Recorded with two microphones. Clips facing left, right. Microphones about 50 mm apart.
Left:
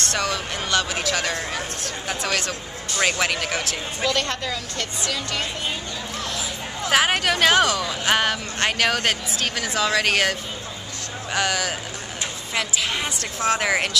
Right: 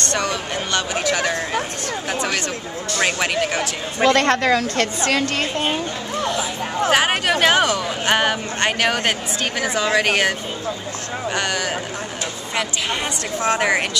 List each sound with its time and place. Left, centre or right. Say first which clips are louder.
0.0 s speech: right 2 dB; centre
4.0 s a woman's voice: right 9 dB; right
6.9 s speech: right 1 dB; centre
11.3 s speech: left 1 dB; centre
13.4 s speech: right 2 dB; centre